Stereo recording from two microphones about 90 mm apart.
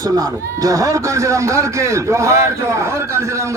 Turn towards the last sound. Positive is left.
turn(degrees=-35)  # may be behind; listen again after turning